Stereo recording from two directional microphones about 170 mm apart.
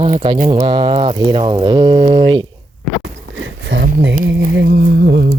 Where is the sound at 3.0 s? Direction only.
90° right.